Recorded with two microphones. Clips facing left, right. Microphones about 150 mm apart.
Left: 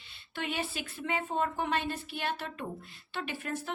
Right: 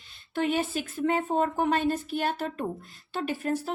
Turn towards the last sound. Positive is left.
turn(degrees=-35)  # may be behind; listen again after turning